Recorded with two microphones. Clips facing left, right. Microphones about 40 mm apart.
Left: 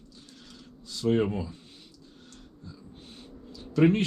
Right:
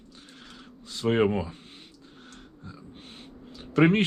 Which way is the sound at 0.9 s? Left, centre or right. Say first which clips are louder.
Right 2 dB; right.